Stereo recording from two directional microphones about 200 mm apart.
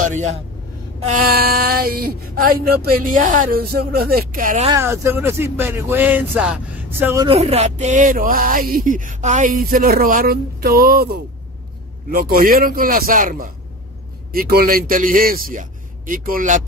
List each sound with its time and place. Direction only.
0.0 s speech: 35° right (ahead or behind)
1.0 s speech: 50° right (ahead or behind)
4.6 s speech: 15° right (ahead or behind)
7.2 s speech: 30° right (ahead or behind)